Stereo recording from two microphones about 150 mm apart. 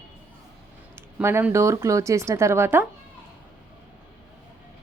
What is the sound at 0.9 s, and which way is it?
A woman's voice, 15° right (ahead or behind).